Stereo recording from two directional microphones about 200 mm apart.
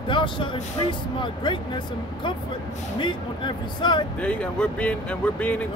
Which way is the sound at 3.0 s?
25° left (ahead or behind).